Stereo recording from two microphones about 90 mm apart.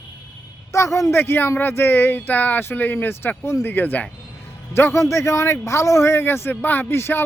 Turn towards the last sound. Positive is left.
turn(degrees=25)  # may be behind; listen again after turning